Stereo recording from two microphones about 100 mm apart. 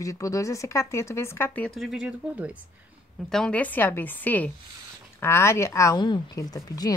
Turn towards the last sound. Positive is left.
turn(degrees=35)  # may be behind; listen again after turning